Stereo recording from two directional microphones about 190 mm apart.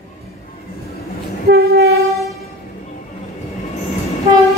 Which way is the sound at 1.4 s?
55° right (ahead or behind).